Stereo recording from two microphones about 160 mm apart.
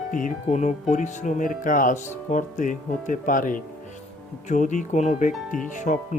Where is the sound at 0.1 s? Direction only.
55° left (ahead or behind).